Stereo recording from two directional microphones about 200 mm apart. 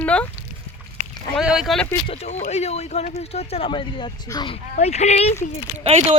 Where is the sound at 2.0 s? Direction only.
35° left (ahead or behind).